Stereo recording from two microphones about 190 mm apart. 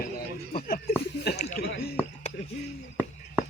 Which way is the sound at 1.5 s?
60° left (ahead or behind).